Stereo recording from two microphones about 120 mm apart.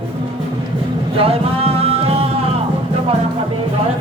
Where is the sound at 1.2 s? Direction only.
55° right (ahead or behind).